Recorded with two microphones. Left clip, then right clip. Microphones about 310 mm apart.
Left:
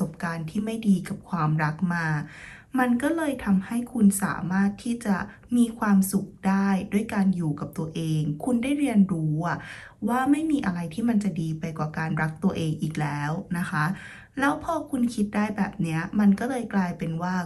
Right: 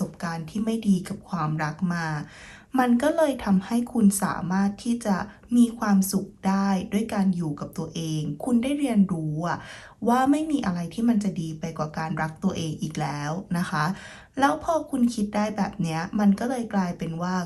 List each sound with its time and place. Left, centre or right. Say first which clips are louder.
0.0 s a woman's voice: left 1 dB; centre